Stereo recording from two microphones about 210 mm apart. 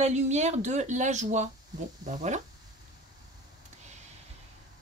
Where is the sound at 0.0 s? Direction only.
35° right (ahead or behind).